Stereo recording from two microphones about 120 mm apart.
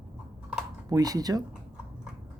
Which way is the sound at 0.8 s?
30° right (ahead or behind).